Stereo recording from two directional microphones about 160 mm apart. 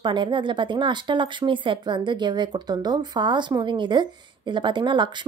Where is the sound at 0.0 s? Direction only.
30° right (ahead or behind).